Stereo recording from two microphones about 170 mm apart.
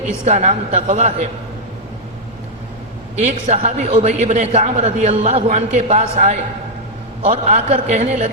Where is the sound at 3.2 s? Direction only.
45° right (ahead or behind).